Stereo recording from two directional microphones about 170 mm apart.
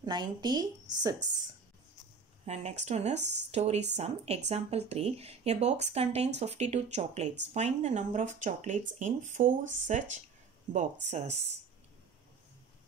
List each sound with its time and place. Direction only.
0.0 s a woman's voice: 25° right (ahead or behind)
2.4 s speech: 40° right (ahead or behind)
3.2 s speech: 90° right
3.5 s speech: 40° right (ahead or behind)